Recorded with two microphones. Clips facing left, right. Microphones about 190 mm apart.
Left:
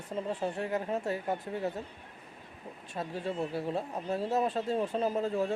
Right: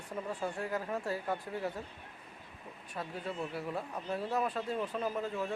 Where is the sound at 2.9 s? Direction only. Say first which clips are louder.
Left 5 dB; 30° left (ahead or behind).